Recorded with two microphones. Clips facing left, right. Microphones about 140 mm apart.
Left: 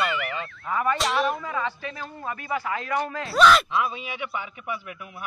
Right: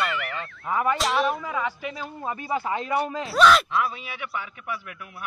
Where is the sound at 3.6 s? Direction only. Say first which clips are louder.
Even; 15° left (ahead or behind).